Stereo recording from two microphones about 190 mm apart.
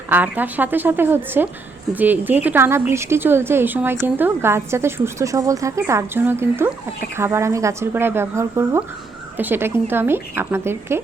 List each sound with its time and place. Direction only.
0.1 s a woman's voice: 10° right (ahead or behind)